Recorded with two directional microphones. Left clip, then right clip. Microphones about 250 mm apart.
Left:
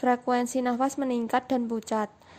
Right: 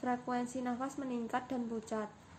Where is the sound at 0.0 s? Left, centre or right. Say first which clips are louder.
Left 12 dB; left.